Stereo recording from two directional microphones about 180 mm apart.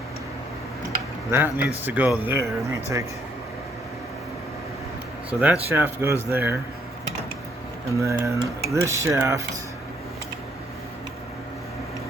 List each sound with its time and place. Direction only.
1.3 s speech: 15° right (ahead or behind)
5.3 s speech: 10° right (ahead or behind)
7.9 s speech: 15° right (ahead or behind)